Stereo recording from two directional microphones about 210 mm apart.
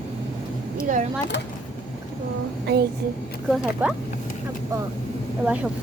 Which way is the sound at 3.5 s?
5° right (ahead or behind).